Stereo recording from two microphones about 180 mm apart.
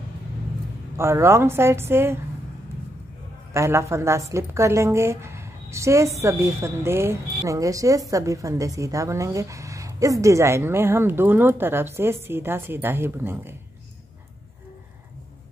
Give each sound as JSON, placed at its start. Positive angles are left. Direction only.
{"t": 0.9, "sound": "a woman's voice", "side_deg": -15}
{"t": 3.5, "sound": "a woman's voice", "side_deg": -15}